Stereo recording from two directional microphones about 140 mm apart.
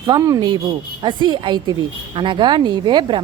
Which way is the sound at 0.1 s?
25° right (ahead or behind).